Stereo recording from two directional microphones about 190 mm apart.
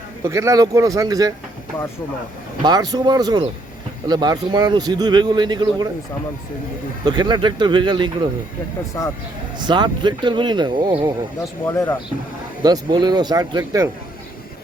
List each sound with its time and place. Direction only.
0.3 s speech: 15° right (ahead or behind)
2.6 s speech: 20° right (ahead or behind)
7.0 s speech: 25° right (ahead or behind)
9.0 s speech: 10° left (ahead or behind)
9.6 s speech: 25° right (ahead or behind)
11.3 s speech: 15° left (ahead or behind)
12.6 s speech: 20° right (ahead or behind)